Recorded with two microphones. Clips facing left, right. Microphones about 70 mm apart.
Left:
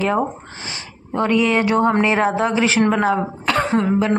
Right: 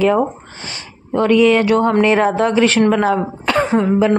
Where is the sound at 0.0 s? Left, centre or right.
Centre.